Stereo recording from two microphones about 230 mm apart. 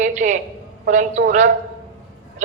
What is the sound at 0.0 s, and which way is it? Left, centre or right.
A woman's voice, right.